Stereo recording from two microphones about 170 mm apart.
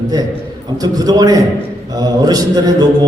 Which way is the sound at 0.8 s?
20° right (ahead or behind).